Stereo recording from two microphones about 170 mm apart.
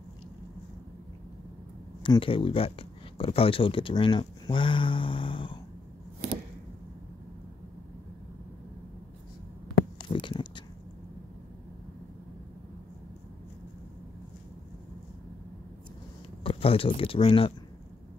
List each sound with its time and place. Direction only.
2.0 s speech: 30° left (ahead or behind)
9.9 s a sound: 30° left (ahead or behind)
16.4 s speech: 35° left (ahead or behind)